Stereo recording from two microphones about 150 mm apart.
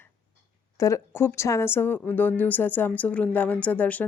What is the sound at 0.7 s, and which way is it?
A woman's voice, 20° left (ahead or behind).